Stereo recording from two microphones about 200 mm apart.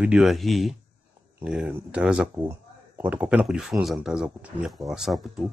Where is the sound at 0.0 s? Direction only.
5° right (ahead or behind).